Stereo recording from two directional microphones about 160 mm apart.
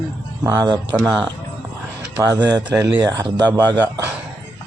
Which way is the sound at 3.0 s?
20° right (ahead or behind).